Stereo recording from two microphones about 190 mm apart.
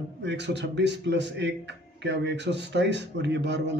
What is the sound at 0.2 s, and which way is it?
Speech, 65° right (ahead or behind).